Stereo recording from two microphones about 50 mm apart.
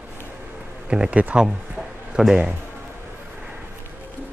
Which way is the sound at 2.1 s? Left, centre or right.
Centre.